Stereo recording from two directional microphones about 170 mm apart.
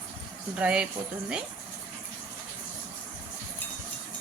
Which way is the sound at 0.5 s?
5° right (ahead or behind).